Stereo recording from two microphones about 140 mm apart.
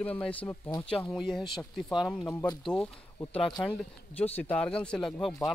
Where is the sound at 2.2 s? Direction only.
30° left (ahead or behind).